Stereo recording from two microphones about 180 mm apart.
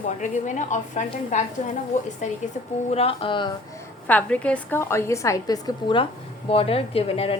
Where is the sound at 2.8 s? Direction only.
35° left (ahead or behind).